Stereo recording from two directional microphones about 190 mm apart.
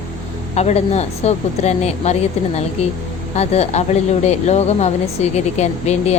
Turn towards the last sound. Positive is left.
turn(degrees=35)  # may be behind; listen again after turning